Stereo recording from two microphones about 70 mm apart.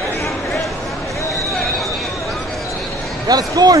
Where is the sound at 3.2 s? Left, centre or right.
Right.